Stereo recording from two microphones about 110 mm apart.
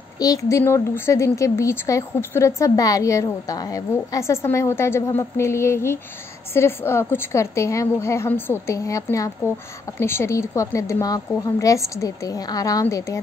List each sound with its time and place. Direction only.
0.2 s speech: 30° left (ahead or behind)